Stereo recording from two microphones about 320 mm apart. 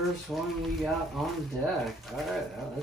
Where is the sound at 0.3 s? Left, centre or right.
Centre.